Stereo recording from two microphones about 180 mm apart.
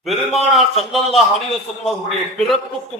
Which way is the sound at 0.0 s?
Centre (ahead or behind).